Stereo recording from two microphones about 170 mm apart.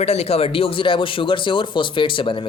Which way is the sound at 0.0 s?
40° left (ahead or behind).